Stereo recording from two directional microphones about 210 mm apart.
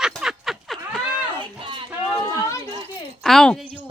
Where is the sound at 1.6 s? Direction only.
25° right (ahead or behind).